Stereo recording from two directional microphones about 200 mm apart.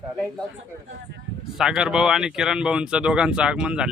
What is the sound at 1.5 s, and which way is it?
Speech, 5° right (ahead or behind).